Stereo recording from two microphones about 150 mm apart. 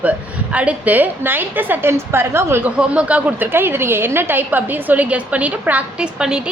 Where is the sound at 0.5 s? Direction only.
10° right (ahead or behind).